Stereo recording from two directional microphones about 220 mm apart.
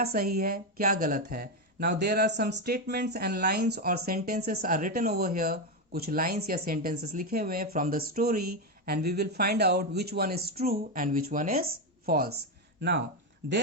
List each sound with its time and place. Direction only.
0.0 s speech: 45° right (ahead or behind)